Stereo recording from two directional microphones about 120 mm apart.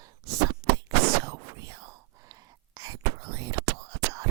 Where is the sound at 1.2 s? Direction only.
30° right (ahead or behind).